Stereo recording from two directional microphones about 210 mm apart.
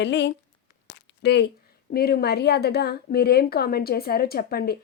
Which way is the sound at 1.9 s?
45° left (ahead or behind).